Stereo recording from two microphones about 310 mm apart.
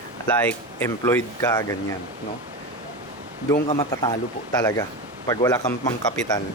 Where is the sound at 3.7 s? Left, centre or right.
Centre.